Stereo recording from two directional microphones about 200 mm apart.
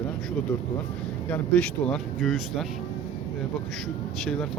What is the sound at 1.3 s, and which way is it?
Speech, 5° left (ahead or behind).